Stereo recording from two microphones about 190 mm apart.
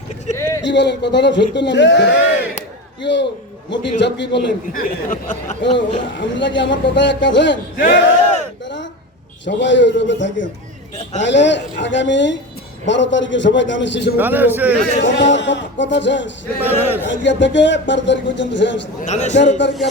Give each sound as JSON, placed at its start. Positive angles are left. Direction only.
{"t": 0.3, "sound": "a sound", "side_deg": 15}
{"t": 0.6, "sound": "a man's voice", "side_deg": 65}
{"t": 5.6, "sound": "speech", "side_deg": 25}
{"t": 6.1, "sound": "a man's voice", "side_deg": 70}
{"t": 7.8, "sound": "speech", "side_deg": 40}
{"t": 8.6, "sound": "a sound", "side_deg": 70}
{"t": 9.5, "sound": "a man's voice", "side_deg": 70}
{"t": 14.2, "sound": "a man's voice", "side_deg": -10}
{"t": 15.3, "sound": "a man's voice", "side_deg": 70}
{"t": 16.6, "sound": "a man's voice", "side_deg": -10}
{"t": 17.1, "sound": "a man's voice", "side_deg": 70}
{"t": 19.0, "sound": "speech", "side_deg": 35}